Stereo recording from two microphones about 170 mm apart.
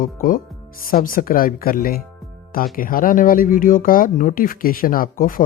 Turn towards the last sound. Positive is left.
turn(degrees=55)  # may be behind; listen again after turning